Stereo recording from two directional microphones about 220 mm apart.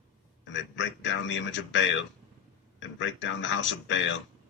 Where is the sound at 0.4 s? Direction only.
55° left (ahead or behind).